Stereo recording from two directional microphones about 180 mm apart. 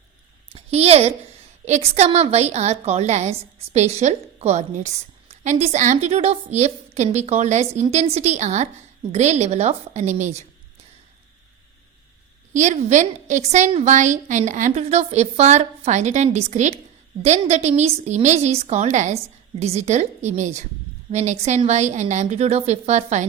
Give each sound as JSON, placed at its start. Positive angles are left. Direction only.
{"t": 0.5, "sound": "a woman's voice", "side_deg": -35}
{"t": 12.5, "sound": "a woman's voice", "side_deg": -40}